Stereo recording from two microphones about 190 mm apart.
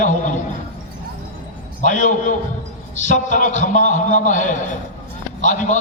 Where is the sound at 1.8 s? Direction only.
40° left (ahead or behind).